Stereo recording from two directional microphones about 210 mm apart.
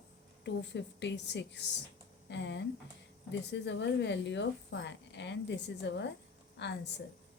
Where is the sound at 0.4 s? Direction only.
55° left (ahead or behind).